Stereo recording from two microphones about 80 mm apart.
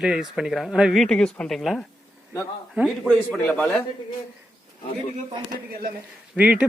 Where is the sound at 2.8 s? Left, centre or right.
Centre.